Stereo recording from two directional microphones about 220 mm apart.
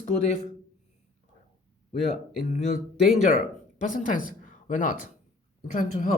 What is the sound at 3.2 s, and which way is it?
A woman's voice, 35° left (ahead or behind).